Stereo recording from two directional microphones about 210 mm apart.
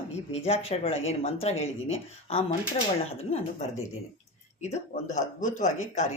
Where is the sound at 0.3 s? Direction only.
30° left (ahead or behind).